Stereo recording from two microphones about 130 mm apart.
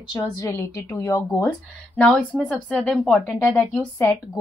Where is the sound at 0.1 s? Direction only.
30° left (ahead or behind).